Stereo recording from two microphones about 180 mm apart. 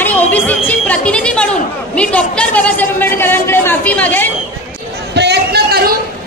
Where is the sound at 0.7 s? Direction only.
5° left (ahead or behind).